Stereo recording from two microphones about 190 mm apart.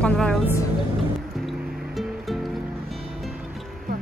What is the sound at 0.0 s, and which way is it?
Music, 5° left (ahead or behind).